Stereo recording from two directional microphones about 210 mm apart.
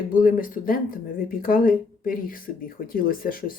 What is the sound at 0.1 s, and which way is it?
Speech, 40° left (ahead or behind).